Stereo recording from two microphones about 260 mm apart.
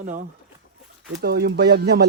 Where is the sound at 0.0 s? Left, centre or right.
Right.